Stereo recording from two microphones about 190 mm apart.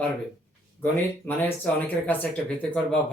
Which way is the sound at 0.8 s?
10° left (ahead or behind).